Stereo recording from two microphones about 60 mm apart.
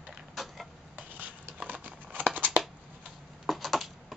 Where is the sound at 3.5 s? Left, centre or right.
Centre.